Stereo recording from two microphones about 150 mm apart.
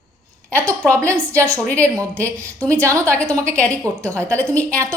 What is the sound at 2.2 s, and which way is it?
A woman's voice, 20° right (ahead or behind).